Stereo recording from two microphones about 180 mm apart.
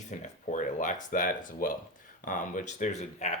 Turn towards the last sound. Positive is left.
turn(degrees=40)  # may be behind; listen again after turning